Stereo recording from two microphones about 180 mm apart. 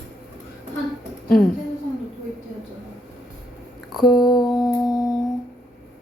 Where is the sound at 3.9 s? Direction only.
Centre (ahead or behind).